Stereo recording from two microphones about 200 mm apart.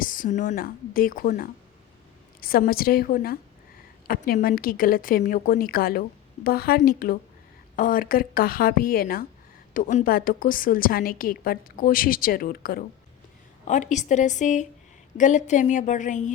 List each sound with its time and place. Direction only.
0.0 s a woman's voice: 45° left (ahead or behind)